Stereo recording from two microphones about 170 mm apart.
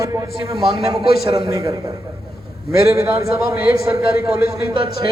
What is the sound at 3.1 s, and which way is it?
A man's voice, 60° left (ahead or behind).